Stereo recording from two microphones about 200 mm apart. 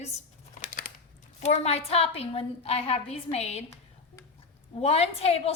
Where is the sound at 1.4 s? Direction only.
30° left (ahead or behind).